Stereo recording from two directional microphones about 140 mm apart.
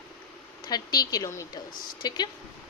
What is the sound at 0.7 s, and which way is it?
Speech, 25° left (ahead or behind).